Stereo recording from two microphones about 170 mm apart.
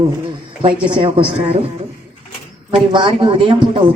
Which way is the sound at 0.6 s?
30° right (ahead or behind).